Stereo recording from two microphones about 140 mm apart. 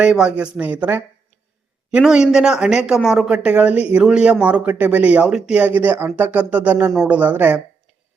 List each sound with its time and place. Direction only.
0.0 s speech: 5° right (ahead or behind)